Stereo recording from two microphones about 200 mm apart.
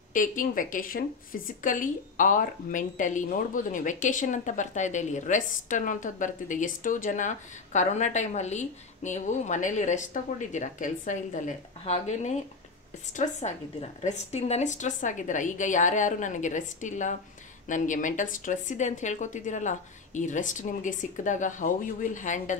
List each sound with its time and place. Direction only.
0.1 s a woman's voice: 40° left (ahead or behind)